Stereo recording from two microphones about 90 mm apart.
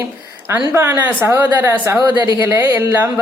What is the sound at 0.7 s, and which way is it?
Speech, 25° right (ahead or behind).